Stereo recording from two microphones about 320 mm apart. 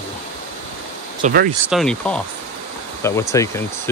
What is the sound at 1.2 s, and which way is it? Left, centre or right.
Speech, right.